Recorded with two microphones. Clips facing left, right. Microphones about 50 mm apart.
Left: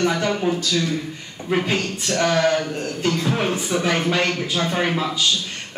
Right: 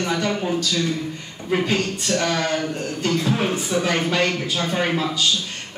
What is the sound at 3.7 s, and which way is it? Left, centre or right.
Speech, left.